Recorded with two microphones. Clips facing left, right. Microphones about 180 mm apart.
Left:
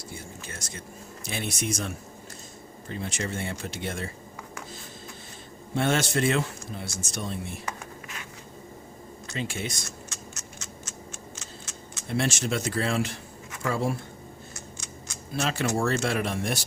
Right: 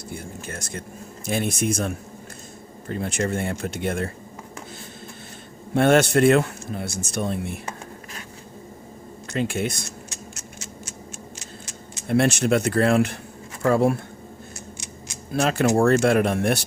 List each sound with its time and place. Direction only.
0.1 s a man's voice: 55° right (ahead or behind)
5.7 s a man's voice: 60° right (ahead or behind)
9.3 s a man's voice: 55° right (ahead or behind)
12.0 s a man's voice: 55° right (ahead or behind)
15.3 s speech: 55° right (ahead or behind)